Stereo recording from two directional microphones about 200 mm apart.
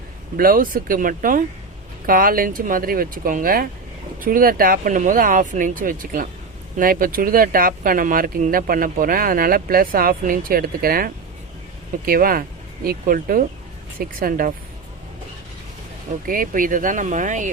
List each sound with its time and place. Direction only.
0.3 s speech: 45° right (ahead or behind)
16.2 s speech: 45° right (ahead or behind)